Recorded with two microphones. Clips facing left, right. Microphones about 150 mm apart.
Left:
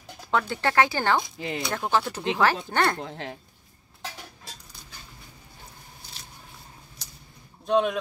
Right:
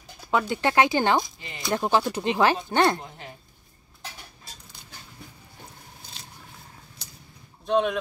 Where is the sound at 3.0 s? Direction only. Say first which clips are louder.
Left 6 dB; 90° left.